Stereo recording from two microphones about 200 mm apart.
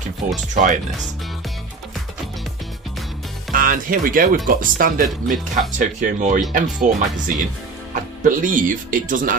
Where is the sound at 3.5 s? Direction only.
45° right (ahead or behind).